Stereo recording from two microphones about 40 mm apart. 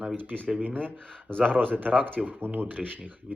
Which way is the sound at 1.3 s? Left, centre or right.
Left.